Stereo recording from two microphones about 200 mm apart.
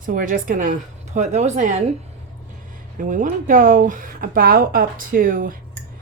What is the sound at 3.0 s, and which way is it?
Speech, 40° right (ahead or behind).